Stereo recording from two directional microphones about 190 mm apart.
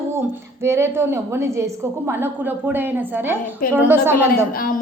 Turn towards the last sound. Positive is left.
turn(degrees=50)  # may be behind; listen again after turning